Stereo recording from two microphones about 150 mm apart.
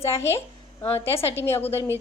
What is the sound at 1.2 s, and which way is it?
Speech, 15° left (ahead or behind).